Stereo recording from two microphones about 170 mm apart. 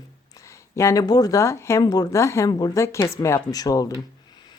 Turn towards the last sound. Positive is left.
turn(degrees=20)  # may be behind; listen again after turning